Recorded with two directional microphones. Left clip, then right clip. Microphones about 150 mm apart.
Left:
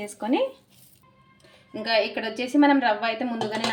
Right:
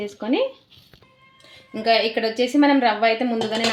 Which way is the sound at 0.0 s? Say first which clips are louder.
Right 3 dB; 25° right (ahead or behind).